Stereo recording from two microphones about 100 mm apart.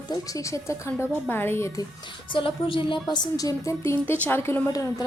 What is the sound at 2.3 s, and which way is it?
Speech, 60° left (ahead or behind).